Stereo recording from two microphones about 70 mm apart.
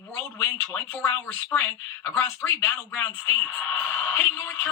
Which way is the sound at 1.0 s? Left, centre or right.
Left.